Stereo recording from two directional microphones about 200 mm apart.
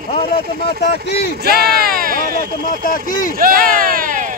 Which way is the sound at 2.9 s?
45° left (ahead or behind).